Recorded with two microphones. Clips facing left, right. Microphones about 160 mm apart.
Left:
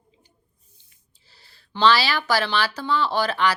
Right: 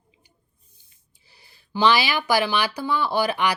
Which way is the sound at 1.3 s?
15° right (ahead or behind).